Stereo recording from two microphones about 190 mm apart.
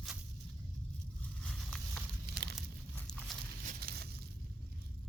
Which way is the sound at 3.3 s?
Centre (ahead or behind).